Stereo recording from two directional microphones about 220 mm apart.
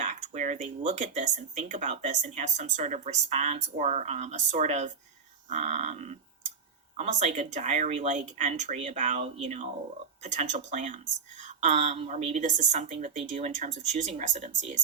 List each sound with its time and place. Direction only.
0.0 s speech: 30° right (ahead or behind)
5.5 s a sound: 30° right (ahead or behind)
6.9 s speech: 30° right (ahead or behind)